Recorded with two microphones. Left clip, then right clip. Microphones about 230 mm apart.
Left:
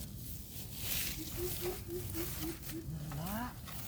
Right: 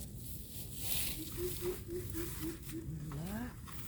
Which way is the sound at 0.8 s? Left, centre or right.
Centre.